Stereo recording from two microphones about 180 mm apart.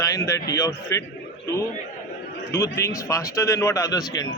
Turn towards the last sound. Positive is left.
turn(degrees=20)  # may be behind; listen again after turning